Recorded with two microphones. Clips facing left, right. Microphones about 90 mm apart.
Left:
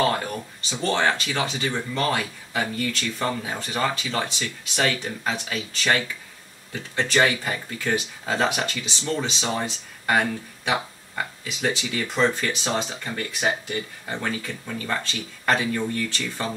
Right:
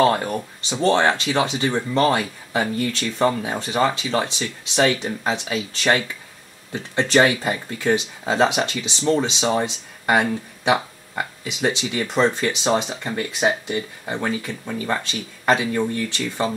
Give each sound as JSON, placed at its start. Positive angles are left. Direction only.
{"t": 0.0, "sound": "speech", "side_deg": -25}